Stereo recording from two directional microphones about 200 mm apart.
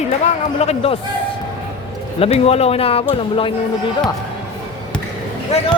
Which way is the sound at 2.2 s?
30° left (ahead or behind).